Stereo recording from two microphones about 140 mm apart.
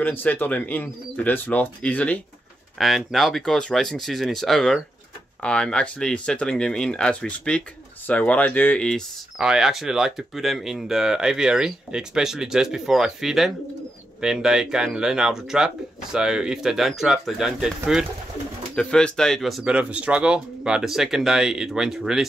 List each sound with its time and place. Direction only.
0.0 s speech: 10° left (ahead or behind)
9.4 s speech: 5° right (ahead or behind)